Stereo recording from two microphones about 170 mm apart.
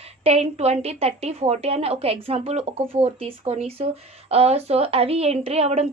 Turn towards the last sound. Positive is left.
turn(degrees=-40)  # may be behind; listen again after turning